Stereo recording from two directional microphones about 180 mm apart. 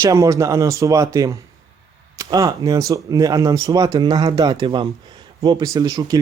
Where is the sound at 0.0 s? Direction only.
15° right (ahead or behind).